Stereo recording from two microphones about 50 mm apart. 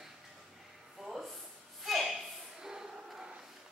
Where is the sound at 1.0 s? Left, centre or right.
Centre.